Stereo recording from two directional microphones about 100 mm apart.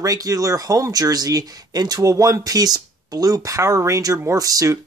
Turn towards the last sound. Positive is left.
turn(degrees=-35)  # may be behind; listen again after turning